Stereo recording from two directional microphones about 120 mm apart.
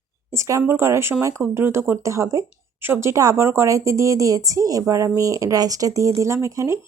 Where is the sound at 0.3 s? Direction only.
25° right (ahead or behind).